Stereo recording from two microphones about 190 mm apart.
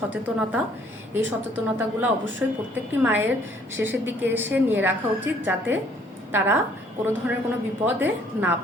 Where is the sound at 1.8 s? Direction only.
10° right (ahead or behind).